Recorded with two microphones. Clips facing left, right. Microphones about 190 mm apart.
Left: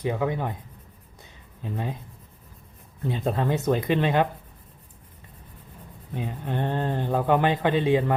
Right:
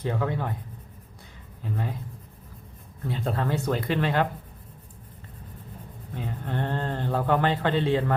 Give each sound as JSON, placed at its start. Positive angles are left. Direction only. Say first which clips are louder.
{"t": 0.0, "sound": "speech", "louder": "left 2 dB", "side_deg": 15}
{"t": 1.6, "sound": "speech", "louder": "left 1 dB", "side_deg": 20}
{"t": 3.0, "sound": "speech", "louder": "left 3 dB", "side_deg": 20}
{"t": 6.1, "sound": "speech", "louder": "left 2 dB", "side_deg": 15}